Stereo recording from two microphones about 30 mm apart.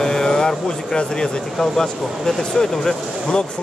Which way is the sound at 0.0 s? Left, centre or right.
Centre.